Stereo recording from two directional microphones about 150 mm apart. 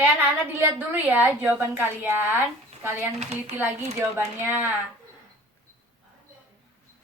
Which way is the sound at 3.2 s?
45° right (ahead or behind).